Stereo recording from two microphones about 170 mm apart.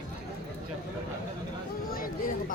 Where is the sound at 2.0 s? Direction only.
55° left (ahead or behind).